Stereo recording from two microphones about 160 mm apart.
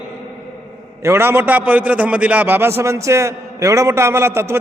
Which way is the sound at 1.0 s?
15° right (ahead or behind).